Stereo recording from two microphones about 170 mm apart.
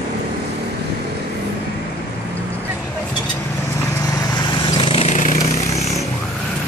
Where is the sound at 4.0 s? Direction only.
20° left (ahead or behind); by 6.0 s 40° left (ahead or behind).